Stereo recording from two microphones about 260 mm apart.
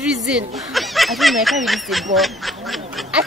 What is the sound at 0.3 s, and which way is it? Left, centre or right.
A child's voice, centre.